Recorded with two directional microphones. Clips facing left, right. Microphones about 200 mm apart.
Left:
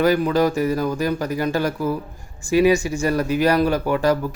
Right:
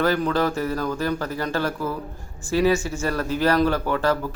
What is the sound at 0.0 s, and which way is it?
Speech, 10° left (ahead or behind).